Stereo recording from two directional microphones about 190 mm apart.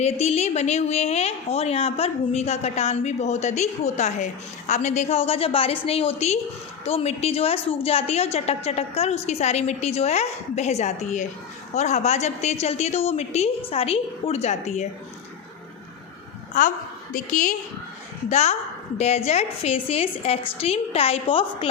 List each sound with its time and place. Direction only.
0.0 s a woman's voice: 35° left (ahead or behind)
16.6 s a woman's voice: 40° left (ahead or behind)